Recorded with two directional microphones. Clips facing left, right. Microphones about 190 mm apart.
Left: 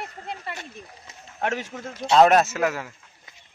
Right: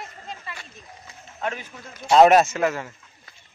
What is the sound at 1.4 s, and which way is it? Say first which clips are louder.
Speech: left 3 dB; 80° left.